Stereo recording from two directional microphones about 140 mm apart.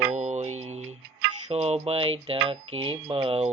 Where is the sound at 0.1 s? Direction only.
60° right (ahead or behind).